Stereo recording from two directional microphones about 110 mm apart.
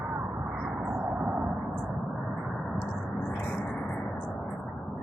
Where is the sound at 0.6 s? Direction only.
15° right (ahead or behind).